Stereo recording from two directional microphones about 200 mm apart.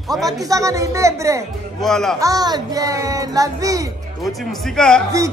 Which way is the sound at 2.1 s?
20° right (ahead or behind).